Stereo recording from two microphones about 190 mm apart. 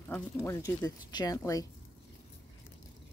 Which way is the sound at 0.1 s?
15° left (ahead or behind).